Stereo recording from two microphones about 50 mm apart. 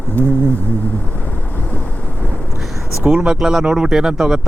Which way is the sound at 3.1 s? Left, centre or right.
Centre.